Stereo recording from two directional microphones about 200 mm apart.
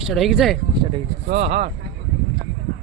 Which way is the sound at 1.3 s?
35° right (ahead or behind).